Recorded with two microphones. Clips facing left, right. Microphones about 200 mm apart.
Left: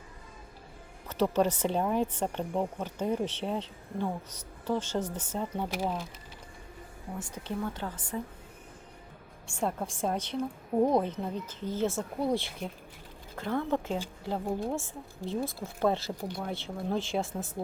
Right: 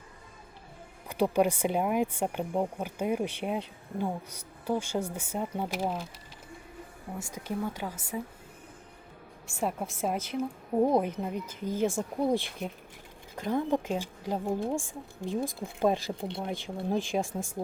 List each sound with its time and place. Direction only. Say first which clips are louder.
1.0 s speech: right 1 dB; 10° right (ahead or behind)
7.2 s speech: right 1 dB; 10° right (ahead or behind)
9.5 s speech: even; 10° right (ahead or behind)
16.2 s speech: right 1 dB; 25° right (ahead or behind)